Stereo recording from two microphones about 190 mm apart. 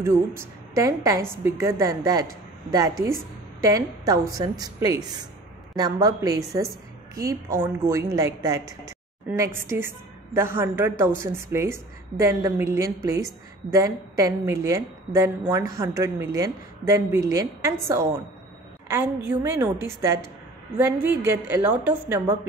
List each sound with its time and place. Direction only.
0.0 s a woman's voice: 15° right (ahead or behind)
3.6 s a woman's voice: 15° right (ahead or behind)